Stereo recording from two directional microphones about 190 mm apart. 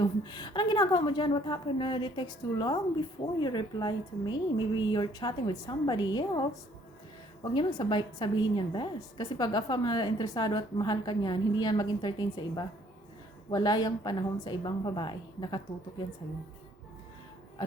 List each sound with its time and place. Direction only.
0.0 s a woman's voice: 20° left (ahead or behind)
7.5 s a woman's voice: 25° left (ahead or behind)
17.6 s a woman's voice: 20° left (ahead or behind)